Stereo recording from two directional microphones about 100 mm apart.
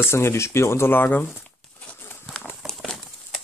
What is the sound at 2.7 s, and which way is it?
Horse, 5° left (ahead or behind).